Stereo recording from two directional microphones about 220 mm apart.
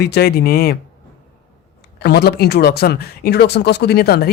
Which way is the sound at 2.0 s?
45° left (ahead or behind).